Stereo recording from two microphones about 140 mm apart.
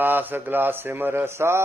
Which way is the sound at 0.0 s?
15° right (ahead or behind).